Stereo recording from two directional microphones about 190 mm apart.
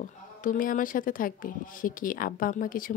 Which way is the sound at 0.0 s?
45° left (ahead or behind).